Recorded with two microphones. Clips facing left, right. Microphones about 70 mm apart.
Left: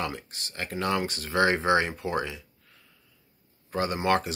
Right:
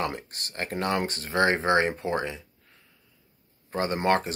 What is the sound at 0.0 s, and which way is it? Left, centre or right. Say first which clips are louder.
Speech: right 2 dB; right.